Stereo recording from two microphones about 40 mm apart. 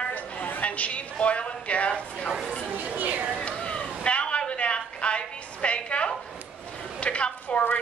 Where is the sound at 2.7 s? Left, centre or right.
Right.